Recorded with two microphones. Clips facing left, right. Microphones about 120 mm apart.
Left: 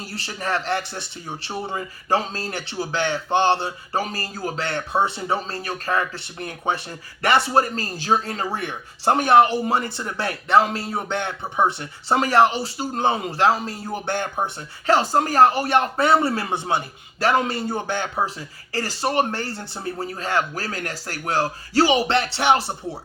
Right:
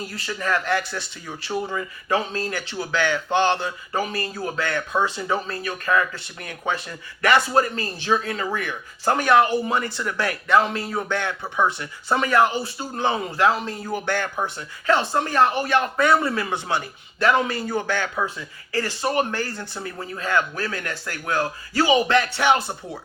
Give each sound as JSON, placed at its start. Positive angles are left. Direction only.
{"t": 0.0, "sound": "speech", "side_deg": 30}
{"t": 13.9, "sound": "speech", "side_deg": 20}
{"t": 14.8, "sound": "speech", "side_deg": 35}
{"t": 18.2, "sound": "speech", "side_deg": 35}